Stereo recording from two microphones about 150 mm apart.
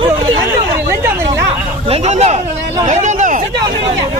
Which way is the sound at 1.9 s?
45° right (ahead or behind).